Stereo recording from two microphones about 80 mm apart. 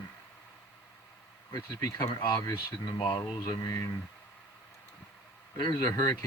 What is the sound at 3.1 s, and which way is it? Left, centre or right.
Speech, left.